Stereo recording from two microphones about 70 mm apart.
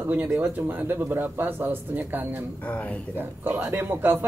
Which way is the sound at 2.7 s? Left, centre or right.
Centre.